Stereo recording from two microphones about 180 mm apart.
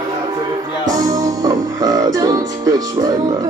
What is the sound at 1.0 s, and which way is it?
Music, 20° right (ahead or behind).